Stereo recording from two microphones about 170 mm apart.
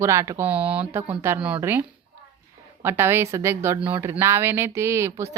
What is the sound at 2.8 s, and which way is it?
A woman's voice, 15° right (ahead or behind).